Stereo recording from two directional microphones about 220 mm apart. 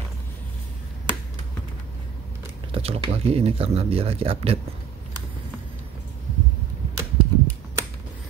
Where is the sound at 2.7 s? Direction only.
25° right (ahead or behind).